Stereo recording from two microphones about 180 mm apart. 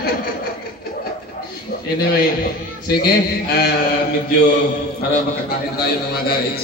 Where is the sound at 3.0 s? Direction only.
60° left (ahead or behind).